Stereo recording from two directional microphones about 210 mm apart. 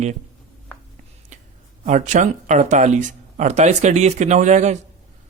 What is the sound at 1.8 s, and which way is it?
Speech, 35° right (ahead or behind).